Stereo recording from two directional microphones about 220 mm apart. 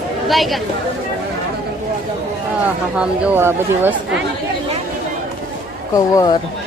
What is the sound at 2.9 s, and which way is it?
Speech, 5° right (ahead or behind).